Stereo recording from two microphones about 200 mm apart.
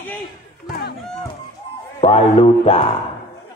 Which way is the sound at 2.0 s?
30° left (ahead or behind).